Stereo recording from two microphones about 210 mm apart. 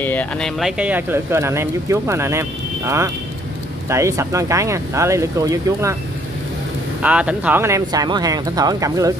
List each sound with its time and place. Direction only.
0.0 s speech: 5° left (ahead or behind); by 5.9 s 15° right (ahead or behind)
7.0 s speech: 5° right (ahead or behind)